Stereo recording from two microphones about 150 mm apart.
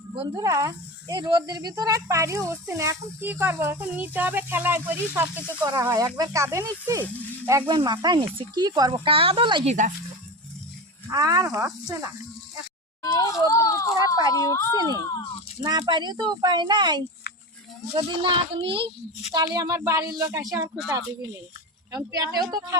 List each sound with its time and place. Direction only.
0.2 s speech: 25° right (ahead or behind)
7.7 s speech: 30° right (ahead or behind)
11.1 s speech: 25° right (ahead or behind)
13.1 s a child's voice: 20° left (ahead or behind)
15.6 s speech: 30° right (ahead or behind)
21.9 s speech: 25° right (ahead or behind)